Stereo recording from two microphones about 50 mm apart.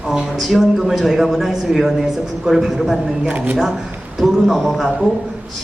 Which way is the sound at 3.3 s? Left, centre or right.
Right.